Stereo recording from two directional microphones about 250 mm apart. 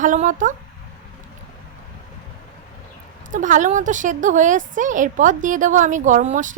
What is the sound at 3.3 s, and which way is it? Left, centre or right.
A woman's voice, right.